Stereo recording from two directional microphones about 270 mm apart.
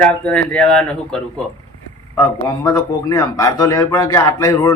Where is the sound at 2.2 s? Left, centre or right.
Centre.